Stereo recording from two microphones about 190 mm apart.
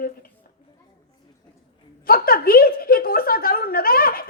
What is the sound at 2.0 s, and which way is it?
Speech, 50° left (ahead or behind).